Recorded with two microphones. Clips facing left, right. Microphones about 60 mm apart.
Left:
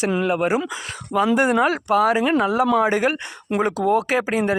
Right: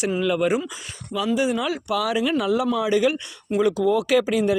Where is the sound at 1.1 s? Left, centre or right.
Left.